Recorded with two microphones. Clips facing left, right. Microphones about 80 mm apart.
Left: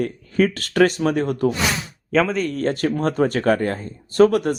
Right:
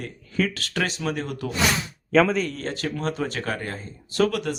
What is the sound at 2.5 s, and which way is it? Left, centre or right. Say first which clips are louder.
Speech: left 8 dB; left.